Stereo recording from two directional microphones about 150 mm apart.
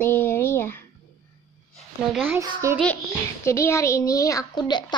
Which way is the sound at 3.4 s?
20° left (ahead or behind).